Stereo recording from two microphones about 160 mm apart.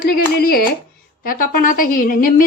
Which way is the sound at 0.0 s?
65° left (ahead or behind).